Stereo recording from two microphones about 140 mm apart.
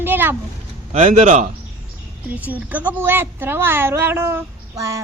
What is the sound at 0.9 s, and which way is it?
Speech, 55° right (ahead or behind).